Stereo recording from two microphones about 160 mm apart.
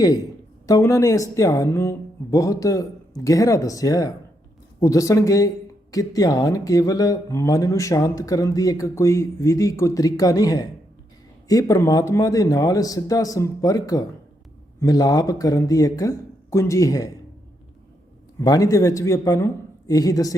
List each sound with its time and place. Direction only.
0.7 s speech: 20° left (ahead or behind)
18.3 s speech: 20° left (ahead or behind)